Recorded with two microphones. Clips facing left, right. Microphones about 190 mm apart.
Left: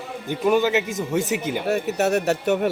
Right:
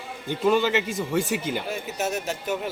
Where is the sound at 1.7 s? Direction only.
65° left (ahead or behind).